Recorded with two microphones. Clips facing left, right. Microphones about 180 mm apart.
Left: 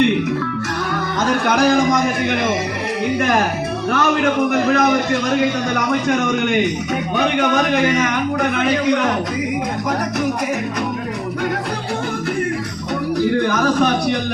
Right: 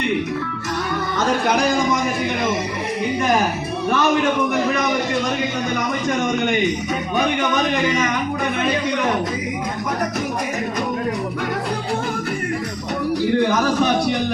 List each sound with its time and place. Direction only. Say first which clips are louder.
1.3 s a man's voice: left 4 dB; 70° left (ahead or behind)
3.2 s a man's voice: even; 65° left (ahead or behind)
7.2 s a man's voice: left 3 dB; 70° left (ahead or behind)